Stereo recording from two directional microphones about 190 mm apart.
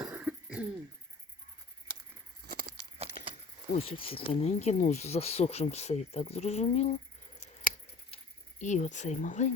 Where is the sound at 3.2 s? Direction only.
50° left (ahead or behind).